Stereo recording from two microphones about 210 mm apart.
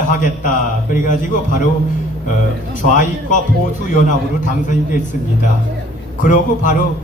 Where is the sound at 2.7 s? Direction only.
40° left (ahead or behind).